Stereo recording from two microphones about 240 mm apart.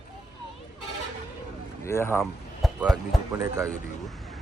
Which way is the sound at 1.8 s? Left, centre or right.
Centre.